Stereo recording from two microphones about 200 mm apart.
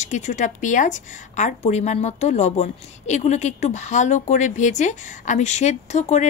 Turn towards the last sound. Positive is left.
turn(degrees=35)  # may be behind; listen again after turning